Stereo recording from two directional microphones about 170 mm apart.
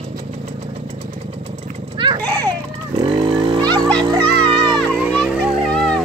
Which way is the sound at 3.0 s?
30° right (ahead or behind).